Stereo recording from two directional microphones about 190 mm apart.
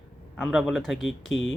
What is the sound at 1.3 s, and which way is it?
Speech, 80° left.